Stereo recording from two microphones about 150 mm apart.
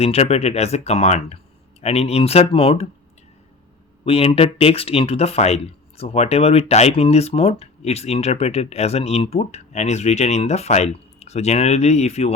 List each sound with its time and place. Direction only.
0.0 s speech: 45° left (ahead or behind)
4.0 s speech: 40° left (ahead or behind)